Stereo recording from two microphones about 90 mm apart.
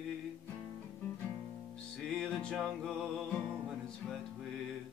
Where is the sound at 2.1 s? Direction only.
5° left (ahead or behind).